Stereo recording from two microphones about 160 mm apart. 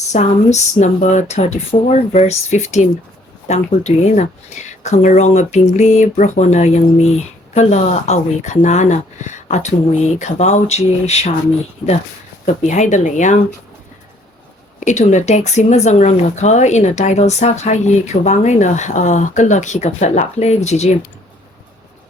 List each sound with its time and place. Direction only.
0.1 s speech: 45° left (ahead or behind)
12.6 s speech: 50° left (ahead or behind)
14.8 s speech: 50° left (ahead or behind)